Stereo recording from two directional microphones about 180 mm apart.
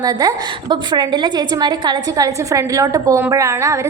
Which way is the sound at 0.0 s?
20° right (ahead or behind).